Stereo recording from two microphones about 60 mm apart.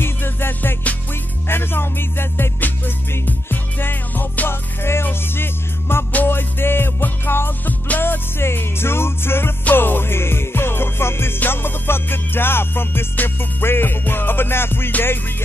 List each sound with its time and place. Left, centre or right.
0.0 s music: left